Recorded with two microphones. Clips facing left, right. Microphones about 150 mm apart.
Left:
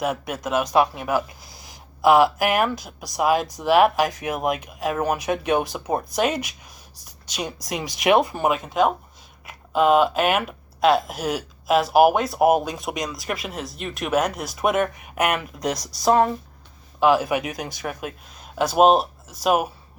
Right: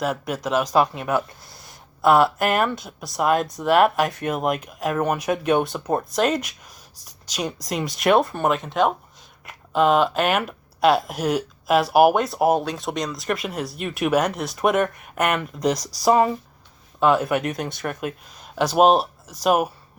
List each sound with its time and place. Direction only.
0.0 s speech: 5° left (ahead or behind)
1.5 s a sound: 90° left
2.0 s speech: 5° left (ahead or behind)